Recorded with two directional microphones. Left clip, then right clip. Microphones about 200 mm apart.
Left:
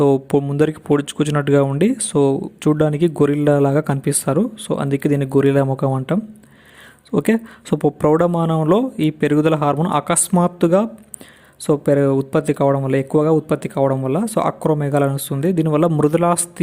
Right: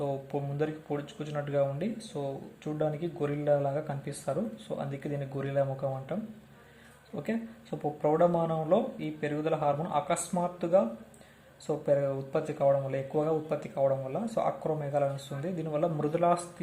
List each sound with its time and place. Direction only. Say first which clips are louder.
0.0 s speech: left 18 dB; 50° left (ahead or behind)
7.2 s speech: left 17 dB; 50° left (ahead or behind)